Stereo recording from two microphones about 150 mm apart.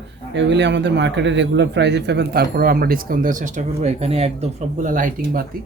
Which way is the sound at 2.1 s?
90° right.